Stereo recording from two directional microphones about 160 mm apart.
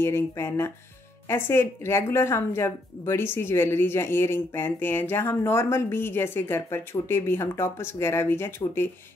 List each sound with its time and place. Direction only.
0.0 s speech: 15° left (ahead or behind)